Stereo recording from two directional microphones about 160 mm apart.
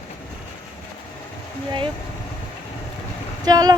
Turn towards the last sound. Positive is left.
turn(degrees=-25)  # may be behind; listen again after turning